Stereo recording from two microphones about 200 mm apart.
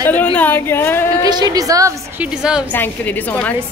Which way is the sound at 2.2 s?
5° right (ahead or behind).